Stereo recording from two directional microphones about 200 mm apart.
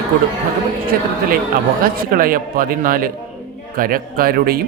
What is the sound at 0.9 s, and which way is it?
Speech, 45° right (ahead or behind).